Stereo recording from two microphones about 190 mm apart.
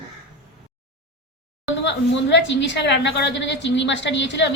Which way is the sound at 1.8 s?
70° left (ahead or behind).